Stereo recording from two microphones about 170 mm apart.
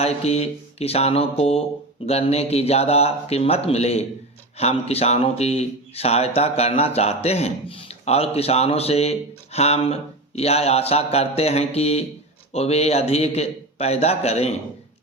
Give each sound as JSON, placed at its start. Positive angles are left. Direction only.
{"t": 0.0, "sound": "speech", "side_deg": 40}